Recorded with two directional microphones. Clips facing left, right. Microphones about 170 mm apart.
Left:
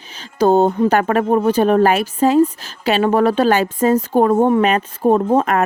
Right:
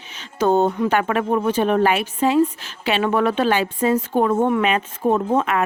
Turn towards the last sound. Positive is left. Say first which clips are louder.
# left 4 dB
turn(degrees=40)  # may be behind; listen again after turning